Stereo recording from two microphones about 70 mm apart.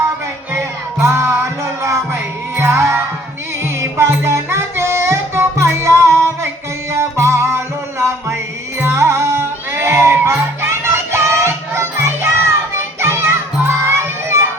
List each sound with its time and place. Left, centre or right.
0.5 s music: right
2.6 s music: right